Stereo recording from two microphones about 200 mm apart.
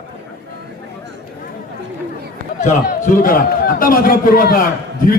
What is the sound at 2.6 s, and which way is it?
A man's voice, 40° left (ahead or behind).